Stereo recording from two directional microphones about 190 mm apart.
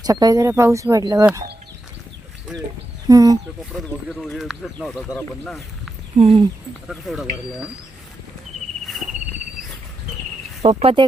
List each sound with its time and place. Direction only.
0.0 s speech: 20° right (ahead or behind)
2.5 s speech: 5° right (ahead or behind)
3.1 s speech: 20° right (ahead or behind)
3.7 s speech: centre (ahead or behind)
6.1 s speech: 30° right (ahead or behind)
6.8 s speech: 5° right (ahead or behind)
10.6 s speech: 35° right (ahead or behind)